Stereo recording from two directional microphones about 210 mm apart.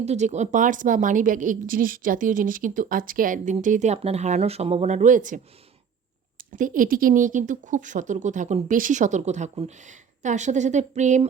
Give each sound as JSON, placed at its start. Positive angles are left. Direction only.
{"t": 0.0, "sound": "a woman's voice", "side_deg": -30}
{"t": 6.5, "sound": "a woman's voice", "side_deg": -40}